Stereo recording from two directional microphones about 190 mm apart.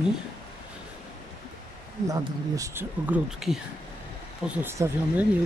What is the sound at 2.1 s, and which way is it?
Speech, 15° right (ahead or behind).